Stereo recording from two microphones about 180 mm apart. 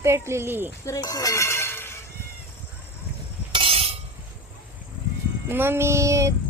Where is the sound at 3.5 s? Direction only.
30° right (ahead or behind).